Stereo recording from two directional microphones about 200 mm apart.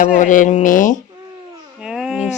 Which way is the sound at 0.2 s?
40° left (ahead or behind).